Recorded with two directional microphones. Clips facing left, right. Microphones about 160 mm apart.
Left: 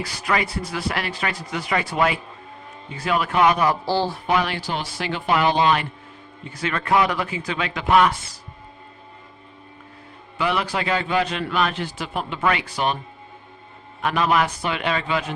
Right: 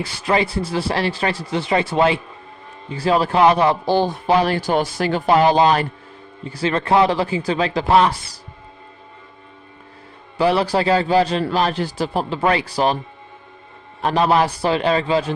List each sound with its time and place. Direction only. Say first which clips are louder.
0.0 s a man's voice: right 5 dB; 30° right (ahead or behind)
4.3 s a man's voice: right 8 dB; 35° right (ahead or behind)
10.3 s a man's voice: right 7 dB; 35° right (ahead or behind)
14.0 s a man's voice: right 4 dB; 35° right (ahead or behind)